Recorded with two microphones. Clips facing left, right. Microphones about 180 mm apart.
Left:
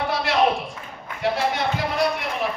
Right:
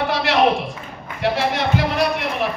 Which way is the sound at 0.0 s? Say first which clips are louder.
Right 3 dB; 90° right.